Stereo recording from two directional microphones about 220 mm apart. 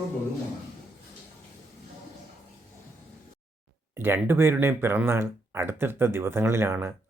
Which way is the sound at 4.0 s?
10° right (ahead or behind).